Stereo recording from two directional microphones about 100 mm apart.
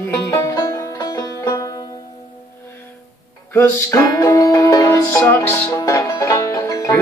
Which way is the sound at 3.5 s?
30° left (ahead or behind).